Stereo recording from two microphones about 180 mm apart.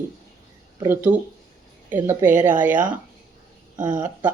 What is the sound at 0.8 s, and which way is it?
Speech, 10° right (ahead or behind).